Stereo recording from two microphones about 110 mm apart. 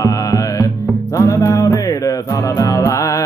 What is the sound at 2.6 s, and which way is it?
Music, 30° left (ahead or behind).